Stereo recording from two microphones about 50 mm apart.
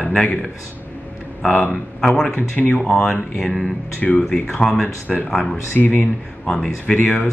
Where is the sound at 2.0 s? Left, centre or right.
Centre.